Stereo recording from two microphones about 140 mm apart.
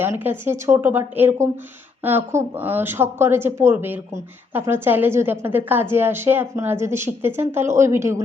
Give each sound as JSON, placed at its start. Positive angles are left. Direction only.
{"t": 0.0, "sound": "speech", "side_deg": -15}